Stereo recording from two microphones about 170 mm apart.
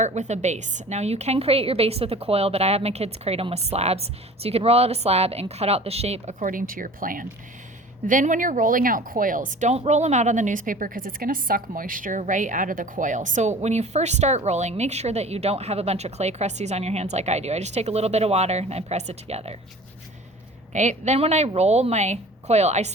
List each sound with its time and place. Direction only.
0.0 s speech: 45° right (ahead or behind)
20.7 s speech: 45° right (ahead or behind)